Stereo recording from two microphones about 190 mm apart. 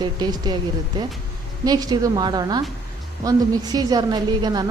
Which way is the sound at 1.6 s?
20° right (ahead or behind).